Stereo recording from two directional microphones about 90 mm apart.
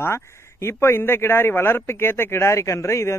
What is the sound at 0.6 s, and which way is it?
Speech, 25° left (ahead or behind).